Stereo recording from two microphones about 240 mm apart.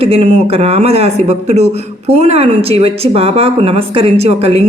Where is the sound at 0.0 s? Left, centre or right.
Right.